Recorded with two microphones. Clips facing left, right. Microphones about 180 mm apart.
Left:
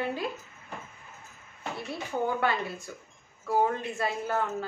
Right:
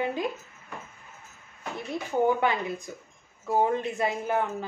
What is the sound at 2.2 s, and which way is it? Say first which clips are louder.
A woman's voice: right 3 dB; 20° right (ahead or behind).